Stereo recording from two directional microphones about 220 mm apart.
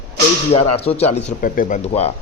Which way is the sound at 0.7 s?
25° left (ahead or behind).